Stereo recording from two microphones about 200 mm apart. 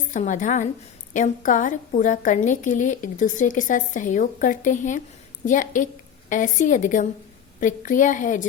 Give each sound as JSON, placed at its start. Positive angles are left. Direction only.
{"t": 0.1, "sound": "a woman's voice", "side_deg": 40}